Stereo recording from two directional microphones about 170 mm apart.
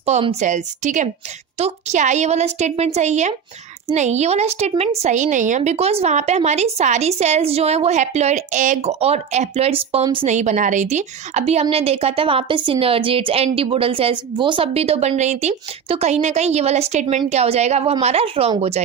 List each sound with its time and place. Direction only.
0.0 s a woman's voice: 35° right (ahead or behind)
10.3 s a woman's voice: 45° right (ahead or behind)